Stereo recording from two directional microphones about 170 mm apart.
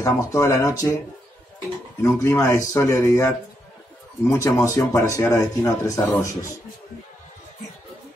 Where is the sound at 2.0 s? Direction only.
15° left (ahead or behind).